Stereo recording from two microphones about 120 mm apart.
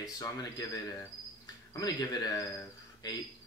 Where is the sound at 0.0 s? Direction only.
30° left (ahead or behind).